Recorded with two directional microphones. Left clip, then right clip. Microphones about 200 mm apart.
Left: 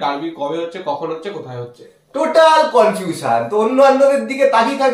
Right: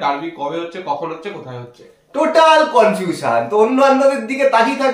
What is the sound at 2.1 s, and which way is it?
Speech, 15° right (ahead or behind).